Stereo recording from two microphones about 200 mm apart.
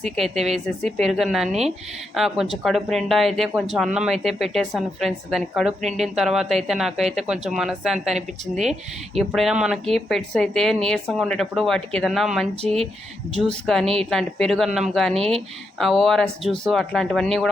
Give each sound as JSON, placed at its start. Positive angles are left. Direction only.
{"t": 0.2, "sound": "speech", "side_deg": 0}
{"t": 12.6, "sound": "speech", "side_deg": -30}
{"t": 13.4, "sound": "speech", "side_deg": 0}